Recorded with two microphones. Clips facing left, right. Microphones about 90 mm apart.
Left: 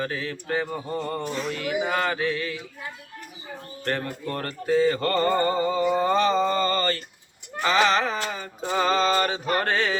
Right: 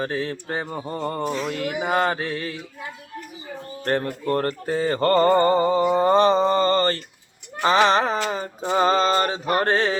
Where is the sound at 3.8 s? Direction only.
35° right (ahead or behind).